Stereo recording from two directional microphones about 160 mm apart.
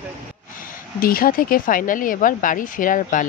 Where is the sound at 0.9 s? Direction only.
65° left (ahead or behind).